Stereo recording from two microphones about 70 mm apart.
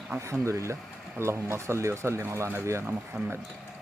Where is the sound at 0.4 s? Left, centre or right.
Right.